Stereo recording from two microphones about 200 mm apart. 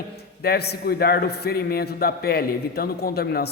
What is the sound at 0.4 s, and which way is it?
A man's voice, 50° left (ahead or behind).